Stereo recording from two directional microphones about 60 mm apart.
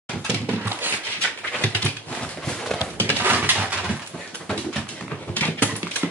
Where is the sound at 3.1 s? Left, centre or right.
Right.